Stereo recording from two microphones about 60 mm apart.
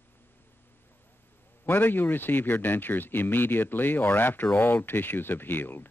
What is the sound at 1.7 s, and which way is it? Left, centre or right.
Speech, left.